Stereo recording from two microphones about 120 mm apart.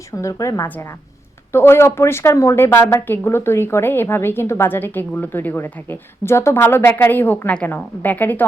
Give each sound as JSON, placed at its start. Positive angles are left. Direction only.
{"t": 0.2, "sound": "a woman's voice", "side_deg": 25}